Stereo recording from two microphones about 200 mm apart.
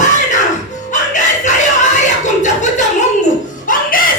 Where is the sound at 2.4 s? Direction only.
35° left (ahead or behind).